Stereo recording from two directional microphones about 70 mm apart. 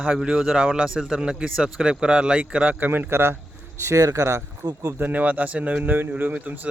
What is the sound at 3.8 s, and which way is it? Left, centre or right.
Speech, right.